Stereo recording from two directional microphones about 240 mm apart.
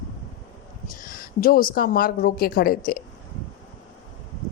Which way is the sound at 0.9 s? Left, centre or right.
Left.